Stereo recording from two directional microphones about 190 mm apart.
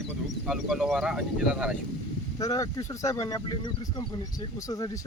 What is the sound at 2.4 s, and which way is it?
Speech, 20° left (ahead or behind).